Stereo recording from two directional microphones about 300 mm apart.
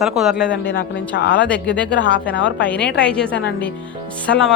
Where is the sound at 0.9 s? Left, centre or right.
Left.